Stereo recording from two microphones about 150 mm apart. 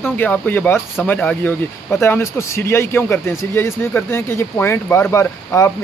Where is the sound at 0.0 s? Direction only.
10° left (ahead or behind).